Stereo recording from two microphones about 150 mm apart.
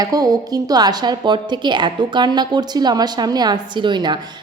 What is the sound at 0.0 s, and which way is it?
A woman's voice, 25° right (ahead or behind).